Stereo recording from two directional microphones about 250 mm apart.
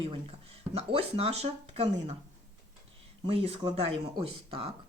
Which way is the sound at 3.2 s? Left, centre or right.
Right.